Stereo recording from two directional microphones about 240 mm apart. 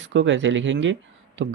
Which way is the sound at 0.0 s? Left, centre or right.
Right.